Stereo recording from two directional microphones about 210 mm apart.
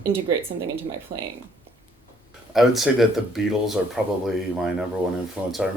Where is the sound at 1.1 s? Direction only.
45° right (ahead or behind).